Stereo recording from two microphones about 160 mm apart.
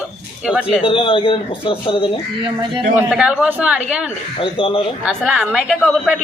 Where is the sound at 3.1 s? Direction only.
5° right (ahead or behind).